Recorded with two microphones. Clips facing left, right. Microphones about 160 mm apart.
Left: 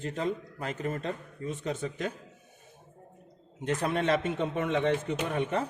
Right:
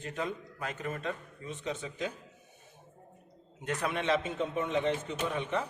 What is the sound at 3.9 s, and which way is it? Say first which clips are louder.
Speech: left 2 dB; 50° left (ahead or behind).